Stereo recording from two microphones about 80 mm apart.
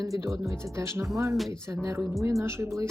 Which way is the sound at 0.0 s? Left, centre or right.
Right.